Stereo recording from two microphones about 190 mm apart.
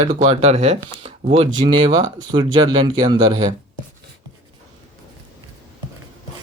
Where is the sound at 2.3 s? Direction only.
25° right (ahead or behind).